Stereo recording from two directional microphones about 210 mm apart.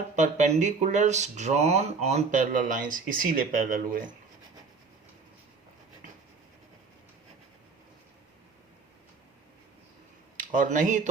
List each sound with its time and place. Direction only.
0.2 s speech: 35° right (ahead or behind)
10.3 s speech: 40° right (ahead or behind)